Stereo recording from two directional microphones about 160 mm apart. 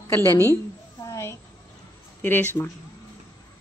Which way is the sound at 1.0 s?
15° left (ahead or behind).